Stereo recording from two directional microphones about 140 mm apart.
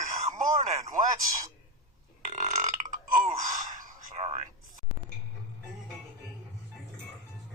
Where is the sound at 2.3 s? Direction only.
60° right (ahead or behind).